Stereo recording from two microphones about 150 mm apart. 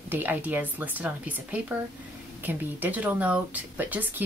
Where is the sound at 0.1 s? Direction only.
15° right (ahead or behind).